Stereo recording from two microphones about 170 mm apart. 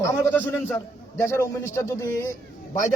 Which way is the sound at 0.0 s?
15° left (ahead or behind).